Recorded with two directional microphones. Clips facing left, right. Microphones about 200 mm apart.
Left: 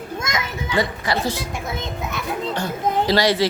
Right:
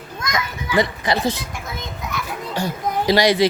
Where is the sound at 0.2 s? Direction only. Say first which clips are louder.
Right 3 dB; 20° left (ahead or behind).